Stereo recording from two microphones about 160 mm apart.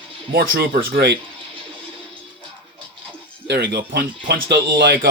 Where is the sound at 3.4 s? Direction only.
90° right.